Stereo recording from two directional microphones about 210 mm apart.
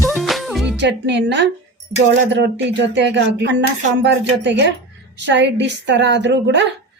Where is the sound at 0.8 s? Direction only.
55° right (ahead or behind).